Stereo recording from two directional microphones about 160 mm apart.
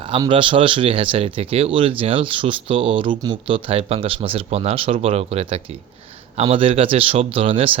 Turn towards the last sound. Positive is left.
turn(degrees=-35)  # may be behind; listen again after turning